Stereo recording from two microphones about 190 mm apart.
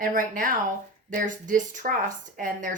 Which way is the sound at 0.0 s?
45° right (ahead or behind).